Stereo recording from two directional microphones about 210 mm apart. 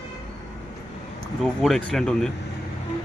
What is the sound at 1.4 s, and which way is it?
Speech, centre (ahead or behind).